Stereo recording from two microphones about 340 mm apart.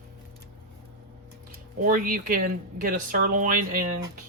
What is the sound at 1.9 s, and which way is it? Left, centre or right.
Speech, right.